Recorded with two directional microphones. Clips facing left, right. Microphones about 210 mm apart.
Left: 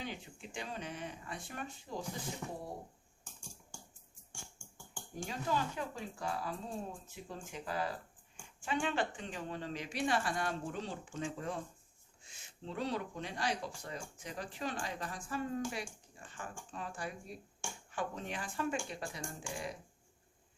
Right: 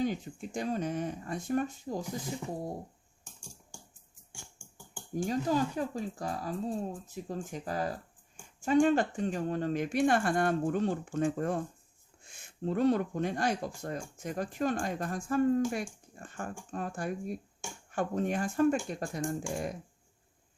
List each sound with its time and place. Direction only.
0.0 s speech: 45° right (ahead or behind)
2.4 s speech: 10° right (ahead or behind)
5.1 s speech: 40° right (ahead or behind)